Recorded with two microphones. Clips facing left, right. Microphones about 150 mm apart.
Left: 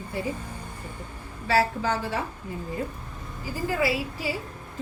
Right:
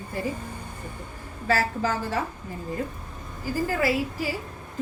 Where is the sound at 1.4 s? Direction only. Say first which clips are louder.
Left 1 dB; 40° right (ahead or behind).